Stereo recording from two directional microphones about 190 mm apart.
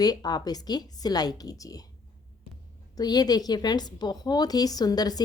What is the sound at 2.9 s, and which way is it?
A woman's voice, 20° left (ahead or behind).